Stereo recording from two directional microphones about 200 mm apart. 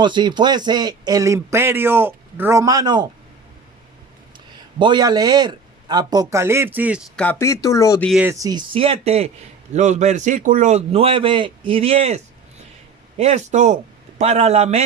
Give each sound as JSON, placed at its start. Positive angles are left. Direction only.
{"t": 0.0, "sound": "speech", "side_deg": -20}
{"t": 4.8, "sound": "speech", "side_deg": -20}
{"t": 7.2, "sound": "speech", "side_deg": 10}
{"t": 8.0, "sound": "speech", "side_deg": -5}
{"t": 8.3, "sound": "a man's voice", "side_deg": -20}